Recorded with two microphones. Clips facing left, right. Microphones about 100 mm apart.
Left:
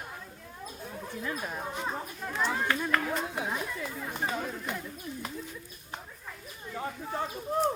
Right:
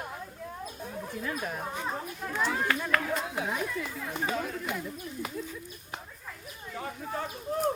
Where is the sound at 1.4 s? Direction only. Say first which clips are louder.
Right 1 dB; 5° left (ahead or behind).